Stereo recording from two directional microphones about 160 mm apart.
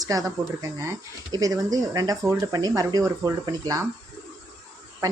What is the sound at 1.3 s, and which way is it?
Speech, 20° right (ahead or behind).